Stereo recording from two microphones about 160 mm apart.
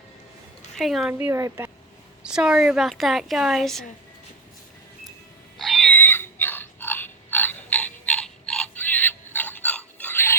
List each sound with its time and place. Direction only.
0.8 s a woman's voice: centre (ahead or behind)
1.2 s speech: 20° right (ahead or behind)
2.2 s a woman's voice: 5° right (ahead or behind)
5.5 s a sound: centre (ahead or behind)